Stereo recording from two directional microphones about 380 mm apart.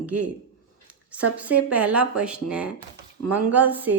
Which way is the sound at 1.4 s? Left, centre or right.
Centre.